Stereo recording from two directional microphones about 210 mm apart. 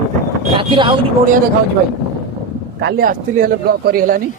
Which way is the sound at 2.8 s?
50° right (ahead or behind).